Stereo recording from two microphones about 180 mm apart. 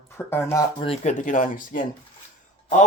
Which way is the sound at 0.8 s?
35° left (ahead or behind).